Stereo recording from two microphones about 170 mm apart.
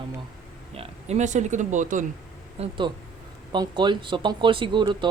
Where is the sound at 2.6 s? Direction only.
30° right (ahead or behind).